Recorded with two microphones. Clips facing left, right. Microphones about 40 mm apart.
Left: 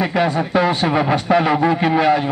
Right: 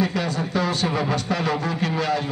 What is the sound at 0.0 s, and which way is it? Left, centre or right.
A man's voice, left.